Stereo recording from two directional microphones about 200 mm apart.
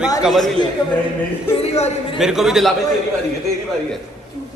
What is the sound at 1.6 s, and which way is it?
Speech, 30° left (ahead or behind).